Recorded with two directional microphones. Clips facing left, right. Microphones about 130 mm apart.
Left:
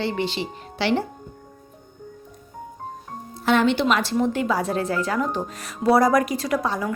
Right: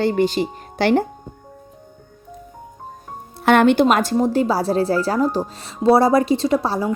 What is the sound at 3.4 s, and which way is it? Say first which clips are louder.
Speech: right 6 dB; 60° right (ahead or behind).